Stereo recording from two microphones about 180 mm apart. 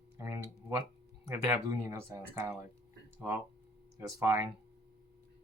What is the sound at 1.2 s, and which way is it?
Speech, 15° right (ahead or behind).